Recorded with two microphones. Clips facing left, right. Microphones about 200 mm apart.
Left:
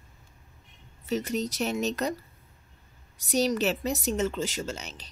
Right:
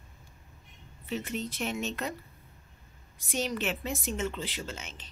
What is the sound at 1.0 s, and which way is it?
Speech, 40° left (ahead or behind).